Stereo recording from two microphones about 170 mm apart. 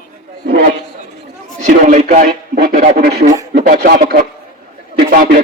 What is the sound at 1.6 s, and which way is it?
A man's voice, 50° right (ahead or behind).